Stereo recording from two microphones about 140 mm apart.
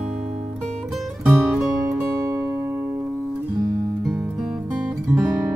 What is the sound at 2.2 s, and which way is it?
Music, 25° right (ahead or behind).